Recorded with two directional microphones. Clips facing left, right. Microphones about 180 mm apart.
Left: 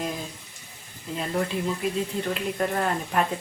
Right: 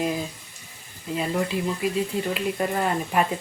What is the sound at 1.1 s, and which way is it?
Speech, 5° right (ahead or behind).